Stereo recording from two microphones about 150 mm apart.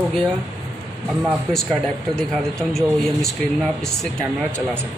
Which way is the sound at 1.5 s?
5° left (ahead or behind).